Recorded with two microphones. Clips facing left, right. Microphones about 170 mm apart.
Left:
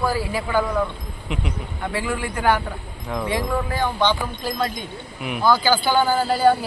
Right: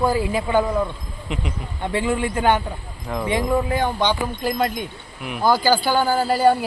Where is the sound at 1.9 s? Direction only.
25° right (ahead or behind).